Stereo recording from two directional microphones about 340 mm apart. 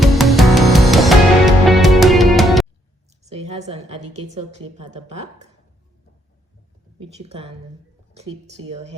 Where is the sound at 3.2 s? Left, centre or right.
Centre.